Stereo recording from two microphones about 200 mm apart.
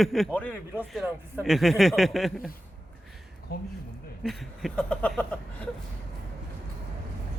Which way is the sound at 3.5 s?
50° left (ahead or behind).